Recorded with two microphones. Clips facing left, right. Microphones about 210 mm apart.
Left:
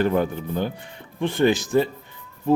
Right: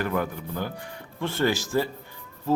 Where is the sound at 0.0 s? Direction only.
25° left (ahead or behind).